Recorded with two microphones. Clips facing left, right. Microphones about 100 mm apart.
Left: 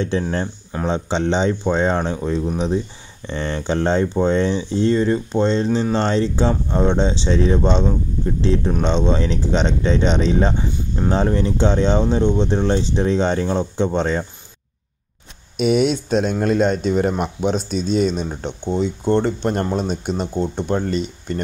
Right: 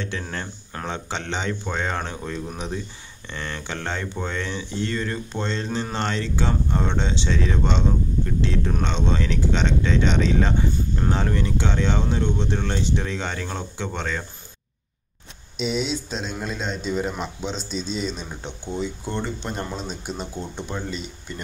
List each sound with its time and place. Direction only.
0.1 s speech: 30° left (ahead or behind)
15.5 s speech: 60° left (ahead or behind)
19.2 s speech: 50° left (ahead or behind)